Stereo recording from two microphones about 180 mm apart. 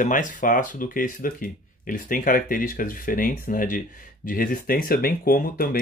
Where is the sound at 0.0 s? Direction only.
45° left (ahead or behind).